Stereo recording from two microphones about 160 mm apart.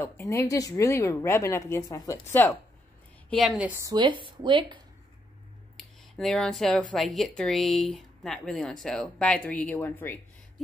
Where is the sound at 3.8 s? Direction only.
30° right (ahead or behind).